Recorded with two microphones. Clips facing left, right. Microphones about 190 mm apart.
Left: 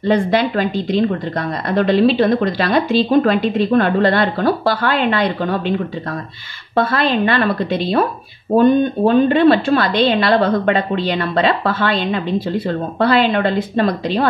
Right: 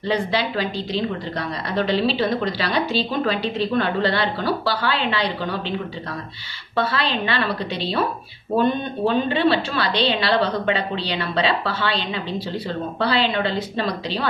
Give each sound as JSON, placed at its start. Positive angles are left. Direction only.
{"t": 0.0, "sound": "a woman's voice", "side_deg": 50}
{"t": 6.7, "sound": "a woman's voice", "side_deg": 50}